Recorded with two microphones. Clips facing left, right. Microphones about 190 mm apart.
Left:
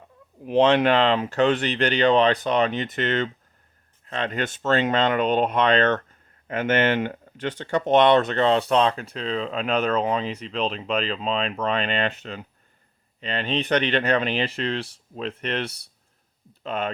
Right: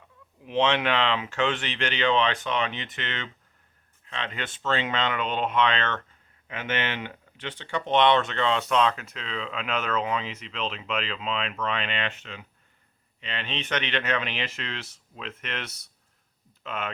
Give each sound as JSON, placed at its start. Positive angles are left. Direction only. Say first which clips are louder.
{"t": 0.4, "sound": "speech", "louder": "left 7 dB", "side_deg": 35}